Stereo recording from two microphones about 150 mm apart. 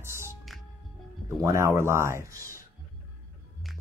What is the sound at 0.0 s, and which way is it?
Music, 15° right (ahead or behind).